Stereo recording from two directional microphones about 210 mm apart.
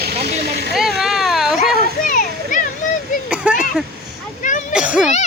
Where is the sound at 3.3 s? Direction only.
5° right (ahead or behind).